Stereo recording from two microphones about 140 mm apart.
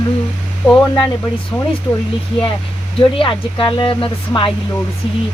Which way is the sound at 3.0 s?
40° left (ahead or behind).